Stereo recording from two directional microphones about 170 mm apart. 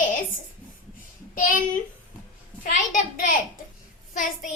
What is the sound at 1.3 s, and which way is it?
Speech, 55° left (ahead or behind).